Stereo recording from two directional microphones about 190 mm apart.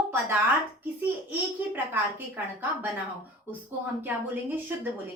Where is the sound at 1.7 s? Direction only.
10° right (ahead or behind).